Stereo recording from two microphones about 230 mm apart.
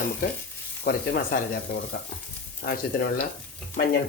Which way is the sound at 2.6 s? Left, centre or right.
Left.